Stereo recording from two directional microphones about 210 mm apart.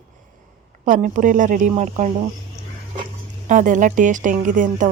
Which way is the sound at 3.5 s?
35° right (ahead or behind).